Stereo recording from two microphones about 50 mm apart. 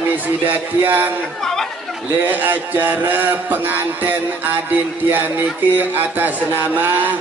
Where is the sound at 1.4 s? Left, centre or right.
Centre.